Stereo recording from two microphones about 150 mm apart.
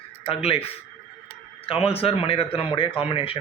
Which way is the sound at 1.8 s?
40° left (ahead or behind).